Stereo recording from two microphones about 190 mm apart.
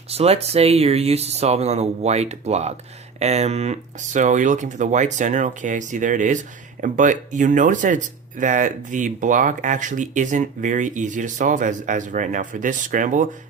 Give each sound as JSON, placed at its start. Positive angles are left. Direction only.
{"t": 0.1, "sound": "speech", "side_deg": -35}